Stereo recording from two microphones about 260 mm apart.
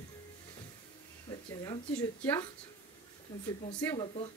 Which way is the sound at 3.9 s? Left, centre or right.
Left.